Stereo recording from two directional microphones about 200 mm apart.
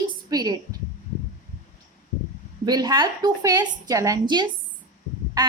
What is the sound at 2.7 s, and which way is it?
A woman's voice, 20° right (ahead or behind).